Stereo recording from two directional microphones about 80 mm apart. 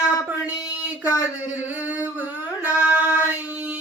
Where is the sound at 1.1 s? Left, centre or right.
Left.